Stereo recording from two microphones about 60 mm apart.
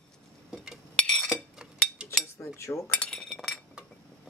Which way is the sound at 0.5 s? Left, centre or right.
Centre.